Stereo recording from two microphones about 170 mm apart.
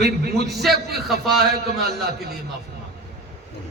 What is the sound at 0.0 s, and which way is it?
Speech, 70° right (ahead or behind).